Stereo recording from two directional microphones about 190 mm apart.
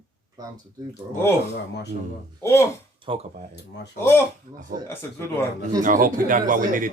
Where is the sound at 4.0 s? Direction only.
15° left (ahead or behind).